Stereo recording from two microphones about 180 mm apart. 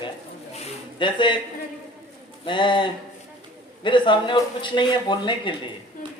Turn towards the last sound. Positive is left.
turn(degrees=25)  # may be behind; listen again after turning